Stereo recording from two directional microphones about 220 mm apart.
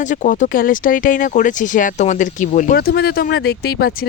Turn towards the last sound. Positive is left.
turn(degrees=45)  # may be behind; listen again after turning